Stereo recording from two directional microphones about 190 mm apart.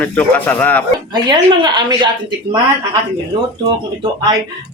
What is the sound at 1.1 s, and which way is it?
Speech, 25° right (ahead or behind).